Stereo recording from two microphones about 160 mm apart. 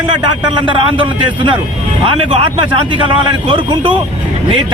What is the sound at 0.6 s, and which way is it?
Speech, 30° right (ahead or behind).